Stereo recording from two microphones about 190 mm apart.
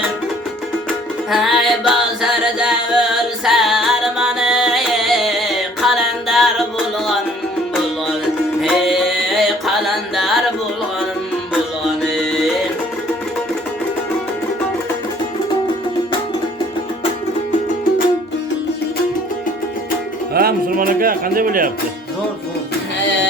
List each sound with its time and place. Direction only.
0.9 s music: centre (ahead or behind)
8.6 s music: centre (ahead or behind)
12.0 s music: centre (ahead or behind)
20.3 s music: 55° right (ahead or behind)